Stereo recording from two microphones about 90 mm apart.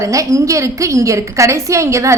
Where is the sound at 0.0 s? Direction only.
35° right (ahead or behind).